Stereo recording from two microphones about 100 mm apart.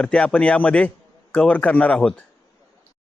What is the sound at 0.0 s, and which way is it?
A man's voice, 10° left (ahead or behind).